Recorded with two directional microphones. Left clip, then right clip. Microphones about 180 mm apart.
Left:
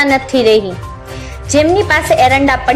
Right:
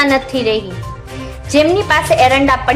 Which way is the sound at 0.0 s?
20° left (ahead or behind).